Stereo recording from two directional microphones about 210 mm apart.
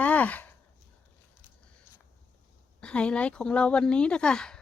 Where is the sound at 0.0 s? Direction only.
5° left (ahead or behind).